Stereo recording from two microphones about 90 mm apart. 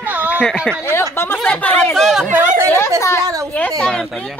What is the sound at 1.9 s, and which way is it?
Speech, centre (ahead or behind).